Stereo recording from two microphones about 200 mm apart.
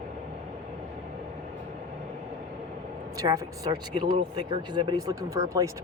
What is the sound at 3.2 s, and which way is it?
Speech, 15° right (ahead or behind).